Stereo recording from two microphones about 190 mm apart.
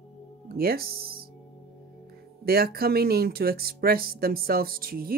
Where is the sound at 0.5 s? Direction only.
55° right (ahead or behind).